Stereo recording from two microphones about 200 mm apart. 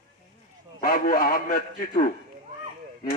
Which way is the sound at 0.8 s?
45° left (ahead or behind).